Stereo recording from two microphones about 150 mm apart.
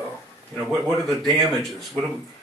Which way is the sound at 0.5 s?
Centre (ahead or behind).